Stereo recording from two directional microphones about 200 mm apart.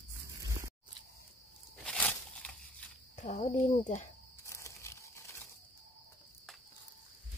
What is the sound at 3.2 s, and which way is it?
Speech, 35° left (ahead or behind).